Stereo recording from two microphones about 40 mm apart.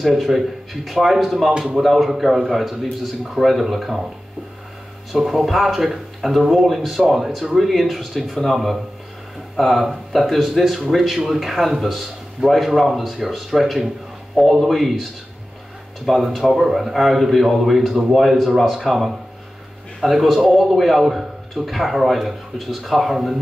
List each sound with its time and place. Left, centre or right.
0.0 s a man's voice: centre
5.1 s a man's voice: centre
9.6 s a man's voice: centre
16.1 s a man's voice: centre